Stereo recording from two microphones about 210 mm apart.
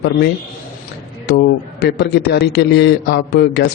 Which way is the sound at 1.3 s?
50° left (ahead or behind).